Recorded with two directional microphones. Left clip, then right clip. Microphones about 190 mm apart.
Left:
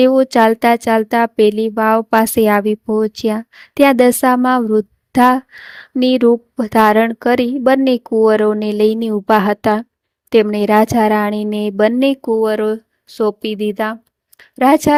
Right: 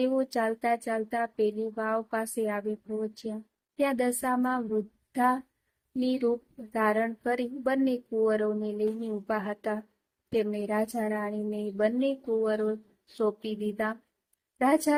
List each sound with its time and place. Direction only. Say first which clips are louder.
0.0 s speech: left 17 dB; 55° left (ahead or behind)